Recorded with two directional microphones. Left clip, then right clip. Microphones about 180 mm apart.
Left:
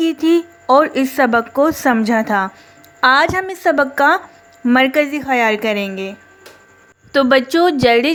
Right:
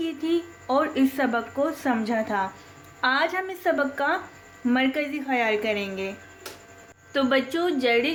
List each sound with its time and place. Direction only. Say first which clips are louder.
0.0 s a woman's voice: left 12 dB; 55° left (ahead or behind)